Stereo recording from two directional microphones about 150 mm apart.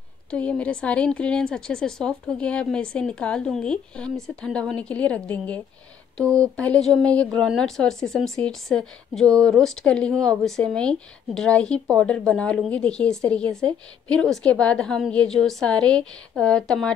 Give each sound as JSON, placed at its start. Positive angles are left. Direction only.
{"t": 0.3, "sound": "a woman's voice", "side_deg": 10}
{"t": 6.2, "sound": "speech", "side_deg": -25}
{"t": 6.5, "sound": "a woman's voice", "side_deg": 5}